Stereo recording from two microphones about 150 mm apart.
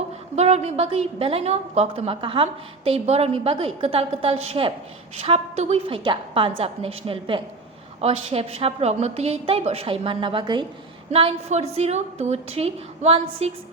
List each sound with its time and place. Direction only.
0.3 s a woman's voice: 45° right (ahead or behind)